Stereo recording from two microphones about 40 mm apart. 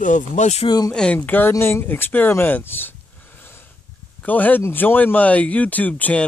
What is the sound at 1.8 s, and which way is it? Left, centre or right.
Speech, left.